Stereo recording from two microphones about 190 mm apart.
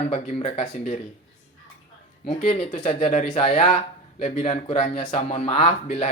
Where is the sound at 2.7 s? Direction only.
35° left (ahead or behind).